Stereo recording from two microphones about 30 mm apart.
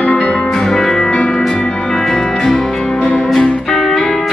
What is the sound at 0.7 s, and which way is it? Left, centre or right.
Music, centre.